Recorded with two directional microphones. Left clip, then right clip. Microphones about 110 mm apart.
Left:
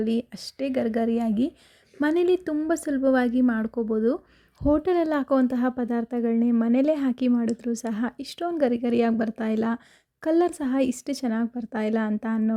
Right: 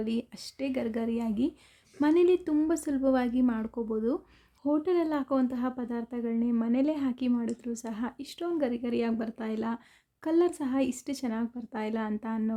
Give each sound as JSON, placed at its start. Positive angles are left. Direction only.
{"t": 0.0, "sound": "speech", "side_deg": 30}
{"t": 4.6, "sound": "speech", "side_deg": 55}